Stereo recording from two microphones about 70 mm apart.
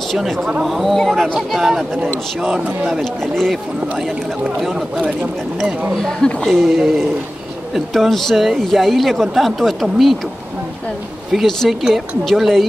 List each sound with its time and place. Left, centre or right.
0.1 s speech: centre
2.9 s speech: centre
4.6 s speech: centre
6.0 s speech: centre
7.7 s speech: centre
11.3 s speech: centre